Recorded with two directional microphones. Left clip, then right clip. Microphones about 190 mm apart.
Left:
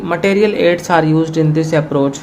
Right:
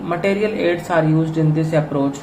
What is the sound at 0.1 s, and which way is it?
Speech, 45° left (ahead or behind).